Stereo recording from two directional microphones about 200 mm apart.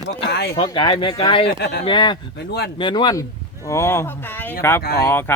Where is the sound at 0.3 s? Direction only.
55° left (ahead or behind).